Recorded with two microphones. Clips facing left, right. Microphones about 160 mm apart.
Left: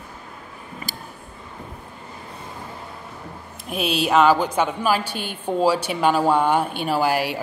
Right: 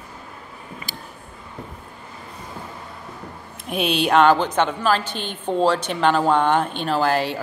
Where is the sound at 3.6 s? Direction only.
Centre (ahead or behind).